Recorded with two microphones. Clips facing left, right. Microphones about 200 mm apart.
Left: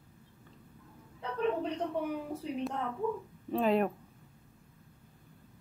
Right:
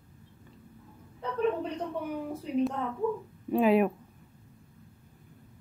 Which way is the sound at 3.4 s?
10° right (ahead or behind).